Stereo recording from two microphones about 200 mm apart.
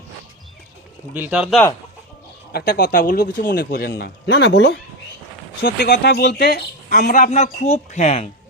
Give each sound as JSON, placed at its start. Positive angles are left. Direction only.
{"t": 1.1, "sound": "speech", "side_deg": -10}
{"t": 2.5, "sound": "speech", "side_deg": 50}